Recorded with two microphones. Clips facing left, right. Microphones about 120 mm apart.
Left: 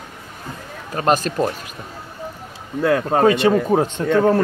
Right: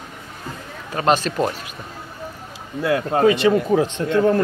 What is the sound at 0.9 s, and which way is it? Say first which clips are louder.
Speech: even; 45° left (ahead or behind).